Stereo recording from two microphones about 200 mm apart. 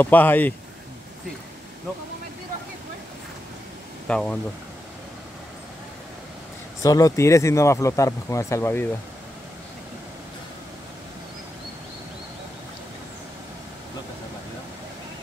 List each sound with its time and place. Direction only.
0.0 s speech: 10° left (ahead or behind)
4.1 s speech: 5° left (ahead or behind)
6.8 s speech: 15° left (ahead or behind)